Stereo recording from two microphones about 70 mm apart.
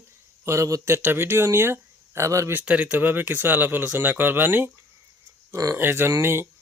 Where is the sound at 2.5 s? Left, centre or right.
Centre.